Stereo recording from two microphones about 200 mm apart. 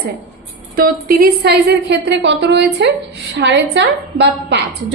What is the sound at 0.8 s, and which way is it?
A woman's voice, 45° right (ahead or behind).